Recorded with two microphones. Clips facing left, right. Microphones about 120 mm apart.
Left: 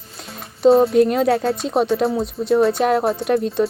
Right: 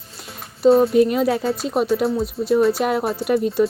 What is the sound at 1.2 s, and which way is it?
Speech, centre (ahead or behind).